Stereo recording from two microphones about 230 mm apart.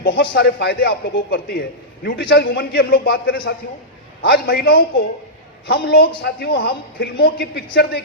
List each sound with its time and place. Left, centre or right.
0.2 s a man's voice: left